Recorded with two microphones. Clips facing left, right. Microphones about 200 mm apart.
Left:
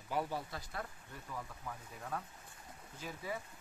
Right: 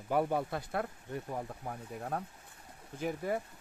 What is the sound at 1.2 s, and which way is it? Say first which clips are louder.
Speech: right 7 dB; 45° right (ahead or behind).